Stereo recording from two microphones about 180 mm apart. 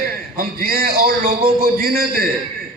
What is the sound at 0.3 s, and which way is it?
A man's voice, 55° right (ahead or behind).